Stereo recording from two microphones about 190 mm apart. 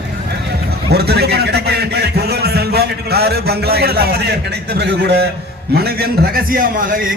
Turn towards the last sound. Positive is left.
turn(degrees=-45)  # may be behind; listen again after turning